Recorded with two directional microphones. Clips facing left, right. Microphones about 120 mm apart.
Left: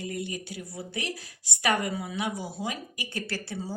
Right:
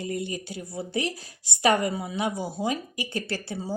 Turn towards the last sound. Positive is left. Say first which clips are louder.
# right 3 dB
turn(degrees=-20)  # may be behind; listen again after turning